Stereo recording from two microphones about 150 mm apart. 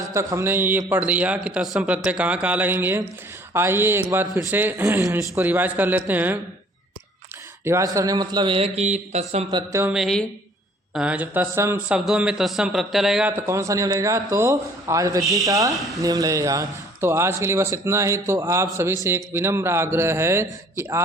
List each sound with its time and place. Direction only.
0.1 s a man's voice: 20° right (ahead or behind)
7.6 s a man's voice: 20° right (ahead or behind); by 9.5 s 45° right (ahead or behind)
9.5 s a man's voice: 30° right (ahead or behind)
9.9 s speech: centre (ahead or behind)
13.3 s a man's voice: 20° right (ahead or behind)
15.2 s speech: centre (ahead or behind)
15.4 s a man's voice: 20° right (ahead or behind)
15.7 s speech: centre (ahead or behind)
16.0 s speech: 25° right (ahead or behind)